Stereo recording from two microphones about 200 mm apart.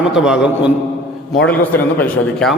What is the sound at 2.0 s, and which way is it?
Speech, 5° left (ahead or behind).